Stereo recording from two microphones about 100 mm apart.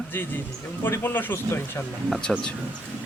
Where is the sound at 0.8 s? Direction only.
20° left (ahead or behind).